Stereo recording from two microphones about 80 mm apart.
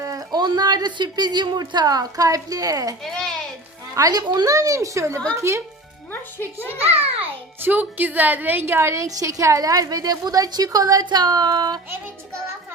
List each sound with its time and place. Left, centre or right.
0.0 s speech: right
3.0 s a sound: centre
3.9 s a child's voice: right
4.2 s speech: right
4.5 s a woman's voice: right
7.6 s a woman's voice: right
9.0 s a woman's voice: right
11.0 s speech: right